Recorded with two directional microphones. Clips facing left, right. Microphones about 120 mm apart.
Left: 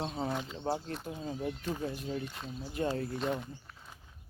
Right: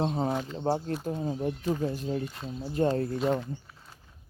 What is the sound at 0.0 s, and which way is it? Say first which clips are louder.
Speech: right 6 dB; 40° right (ahead or behind).